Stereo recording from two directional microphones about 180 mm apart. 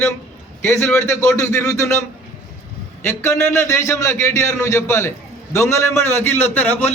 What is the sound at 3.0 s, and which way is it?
A man's voice, 15° left (ahead or behind).